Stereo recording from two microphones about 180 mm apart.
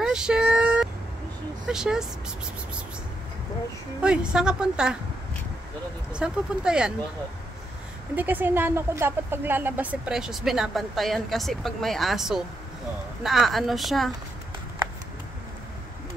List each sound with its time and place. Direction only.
0.0 s vehicle: 5° right (ahead or behind)
1.7 s speech: 5° right (ahead or behind)
4.0 s speech: 5° right (ahead or behind)
6.1 s speech: 5° right (ahead or behind)
8.2 s speech: 10° right (ahead or behind)